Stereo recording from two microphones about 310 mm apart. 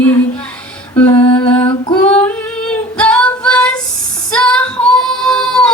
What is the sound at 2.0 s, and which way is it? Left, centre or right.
Female singing, centre.